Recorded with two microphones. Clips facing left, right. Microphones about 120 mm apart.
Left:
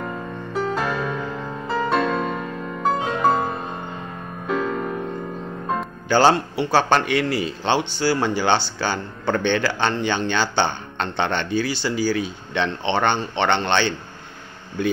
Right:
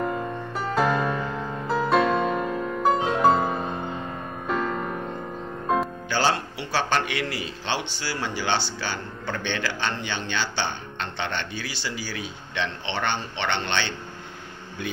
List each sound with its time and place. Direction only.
0.5 s music: centre (ahead or behind)
6.0 s a man's voice: 45° left (ahead or behind)
8.0 s speech: 45° left (ahead or behind)